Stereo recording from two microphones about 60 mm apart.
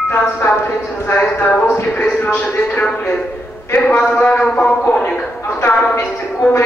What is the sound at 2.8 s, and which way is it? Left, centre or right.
Speech, left.